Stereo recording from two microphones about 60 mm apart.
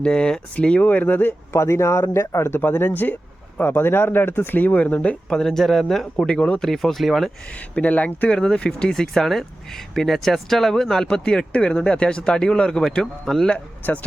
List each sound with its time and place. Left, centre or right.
0.0 s speech: centre
1.5 s speech: left
2.6 s speech: left
5.0 s speech: centre
6.2 s speech: centre
6.6 s speech: centre
7.8 s speech: left
8.9 s speech: centre